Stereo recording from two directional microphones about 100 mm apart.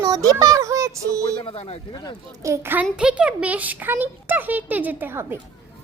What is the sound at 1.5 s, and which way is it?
Speech, 70° left (ahead or behind).